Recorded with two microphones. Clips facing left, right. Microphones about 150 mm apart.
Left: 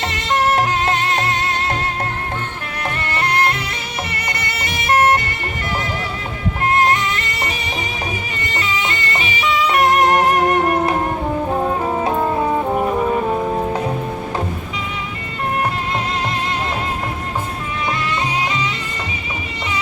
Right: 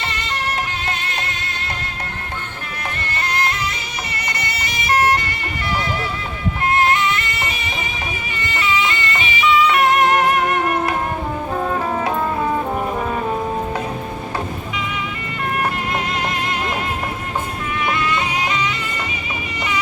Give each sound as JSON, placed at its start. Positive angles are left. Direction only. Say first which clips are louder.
{"t": 0.0, "sound": "music", "louder": "left 5 dB", "side_deg": 90}
{"t": 0.6, "sound": "music", "louder": "left 8 dB", "side_deg": 80}
{"t": 3.1, "sound": "music", "louder": "left 4 dB", "side_deg": 60}
{"t": 6.7, "sound": "music", "louder": "even", "side_deg": 40}